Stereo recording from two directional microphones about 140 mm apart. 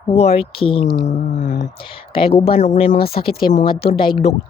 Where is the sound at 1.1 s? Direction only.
65° left (ahead or behind).